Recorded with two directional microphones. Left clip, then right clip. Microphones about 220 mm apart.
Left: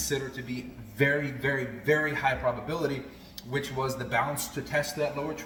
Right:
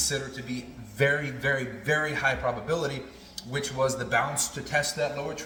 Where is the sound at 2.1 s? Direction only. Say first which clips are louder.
Right 1 dB; 10° right (ahead or behind).